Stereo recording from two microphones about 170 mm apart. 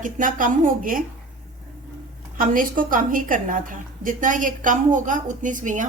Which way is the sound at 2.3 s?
55° right (ahead or behind).